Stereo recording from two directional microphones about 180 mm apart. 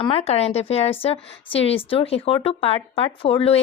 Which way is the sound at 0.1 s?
35° left (ahead or behind).